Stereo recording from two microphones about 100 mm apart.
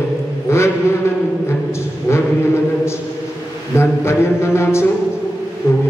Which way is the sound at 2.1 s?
30° left (ahead or behind).